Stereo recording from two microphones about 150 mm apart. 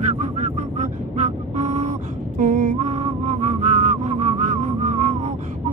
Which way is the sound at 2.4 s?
55° right (ahead or behind).